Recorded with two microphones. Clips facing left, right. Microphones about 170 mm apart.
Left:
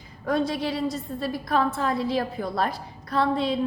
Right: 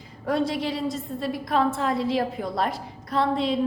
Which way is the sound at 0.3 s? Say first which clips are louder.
Even; 25° right (ahead or behind).